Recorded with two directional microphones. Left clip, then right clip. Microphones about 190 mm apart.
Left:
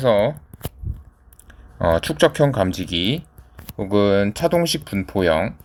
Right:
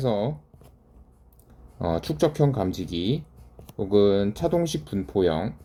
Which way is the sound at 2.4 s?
40° left (ahead or behind).